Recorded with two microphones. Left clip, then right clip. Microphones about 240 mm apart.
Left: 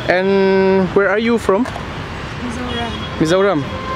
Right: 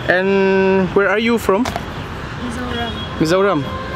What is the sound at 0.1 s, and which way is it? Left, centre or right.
Speech, centre.